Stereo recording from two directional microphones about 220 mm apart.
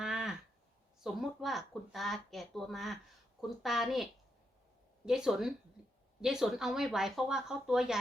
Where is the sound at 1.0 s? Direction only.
Centre (ahead or behind).